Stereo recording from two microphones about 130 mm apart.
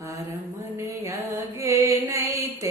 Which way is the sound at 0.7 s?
20° right (ahead or behind).